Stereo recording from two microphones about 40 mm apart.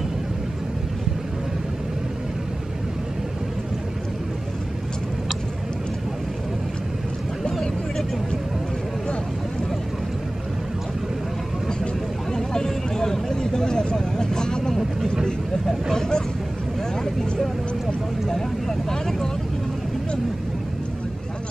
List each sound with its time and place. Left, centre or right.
12.3 s vehicle: centre